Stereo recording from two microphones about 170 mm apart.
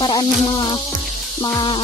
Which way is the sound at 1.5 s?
25° left (ahead or behind).